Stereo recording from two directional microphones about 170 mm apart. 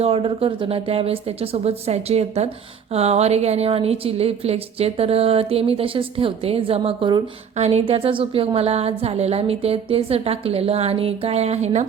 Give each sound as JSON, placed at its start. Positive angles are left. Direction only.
{"t": 0.0, "sound": "a woman's voice", "side_deg": -35}